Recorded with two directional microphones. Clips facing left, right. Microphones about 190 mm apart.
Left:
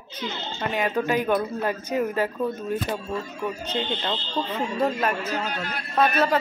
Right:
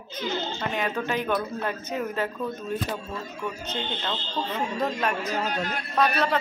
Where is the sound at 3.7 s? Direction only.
10° left (ahead or behind).